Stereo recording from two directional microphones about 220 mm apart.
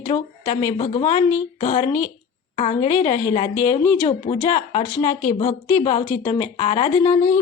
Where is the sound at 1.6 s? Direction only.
30° left (ahead or behind).